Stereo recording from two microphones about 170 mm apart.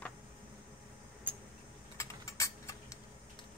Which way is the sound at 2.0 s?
20° left (ahead or behind).